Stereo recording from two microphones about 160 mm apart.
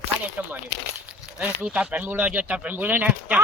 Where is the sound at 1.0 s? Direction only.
10° right (ahead or behind).